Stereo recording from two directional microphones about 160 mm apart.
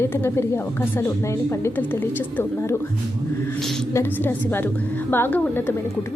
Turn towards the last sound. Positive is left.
turn(degrees=10)  # may be behind; listen again after turning